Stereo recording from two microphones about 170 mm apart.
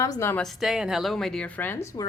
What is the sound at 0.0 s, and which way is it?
Speech, 15° left (ahead or behind).